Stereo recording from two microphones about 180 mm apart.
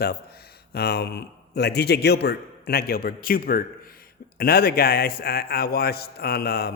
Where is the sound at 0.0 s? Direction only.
60° left (ahead or behind).